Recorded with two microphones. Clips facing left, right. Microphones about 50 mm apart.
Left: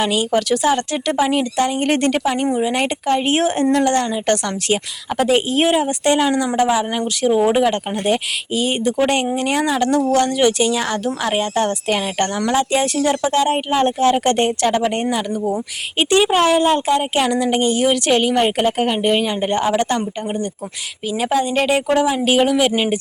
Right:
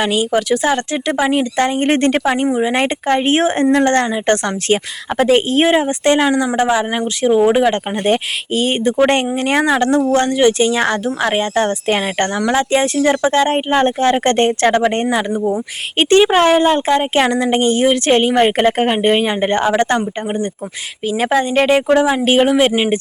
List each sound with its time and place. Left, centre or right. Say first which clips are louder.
0.0 s speech: right 2 dB; centre
0.6 s speech: right 1 dB; right
1.1 s speech: right 2 dB; centre
1.5 s speech: right 3 dB; right
2.5 s a woman's voice: right 2 dB; centre
2.7 s speech: right 3 dB; right
6.1 s speech: right 3 dB; centre
6.6 s speech: even; right
7.2 s speech: right 3 dB; right
7.6 s speech: right 3 dB; right
15.1 s speech: right 4 dB; right
16.0 s speech: right 4 dB; right
21.1 s speech: right 3 dB; right